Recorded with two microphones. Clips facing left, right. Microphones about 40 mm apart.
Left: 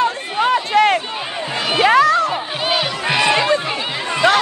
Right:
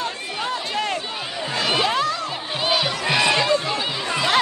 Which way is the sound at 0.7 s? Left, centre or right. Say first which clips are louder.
Left 12 dB; left.